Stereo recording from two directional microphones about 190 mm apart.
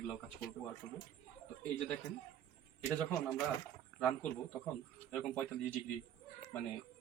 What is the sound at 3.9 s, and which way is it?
Speech, 5° left (ahead or behind).